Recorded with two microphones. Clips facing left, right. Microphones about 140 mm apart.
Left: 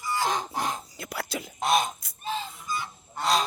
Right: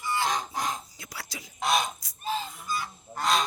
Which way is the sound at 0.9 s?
60° left (ahead or behind).